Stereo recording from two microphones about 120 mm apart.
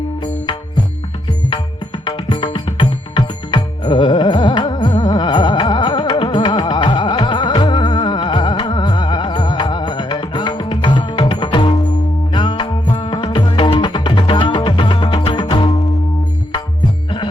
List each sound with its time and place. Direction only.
2.0 s music: 40° left (ahead or behind)